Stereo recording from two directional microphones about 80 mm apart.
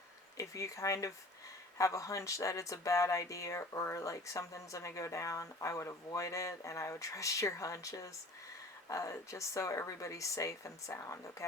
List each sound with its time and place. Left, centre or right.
0.3 s speech: left